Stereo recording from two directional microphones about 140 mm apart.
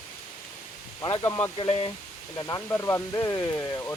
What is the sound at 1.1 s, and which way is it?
Speech, 25° left (ahead or behind).